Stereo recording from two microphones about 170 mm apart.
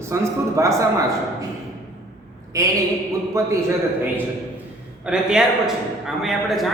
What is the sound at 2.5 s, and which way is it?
Speech, 20° right (ahead or behind).